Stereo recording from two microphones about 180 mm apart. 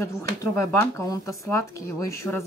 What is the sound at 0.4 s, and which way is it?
Speech, 15° left (ahead or behind).